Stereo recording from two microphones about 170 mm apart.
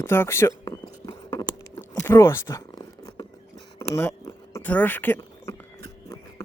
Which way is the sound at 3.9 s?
15° left (ahead or behind).